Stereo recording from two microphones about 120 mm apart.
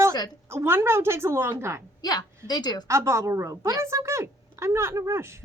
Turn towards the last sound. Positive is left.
turn(degrees=-20)  # may be behind; listen again after turning